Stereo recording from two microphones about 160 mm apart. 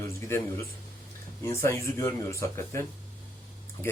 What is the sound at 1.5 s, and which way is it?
A man's voice, 15° left (ahead or behind).